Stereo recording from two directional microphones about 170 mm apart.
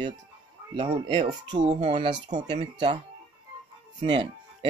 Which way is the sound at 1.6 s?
40° right (ahead or behind).